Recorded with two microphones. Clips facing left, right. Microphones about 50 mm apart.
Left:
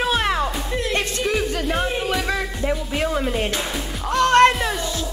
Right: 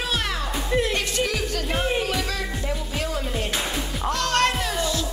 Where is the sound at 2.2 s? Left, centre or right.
Left.